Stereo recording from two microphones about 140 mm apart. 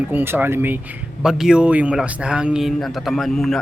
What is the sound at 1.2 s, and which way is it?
A man's voice, 5° right (ahead or behind).